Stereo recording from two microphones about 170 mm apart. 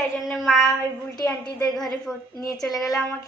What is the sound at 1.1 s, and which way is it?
Speech, 25° left (ahead or behind).